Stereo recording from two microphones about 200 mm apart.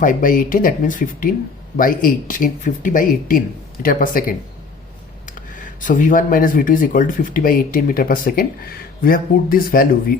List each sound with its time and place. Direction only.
0.0 s speech: 40° left (ahead or behind)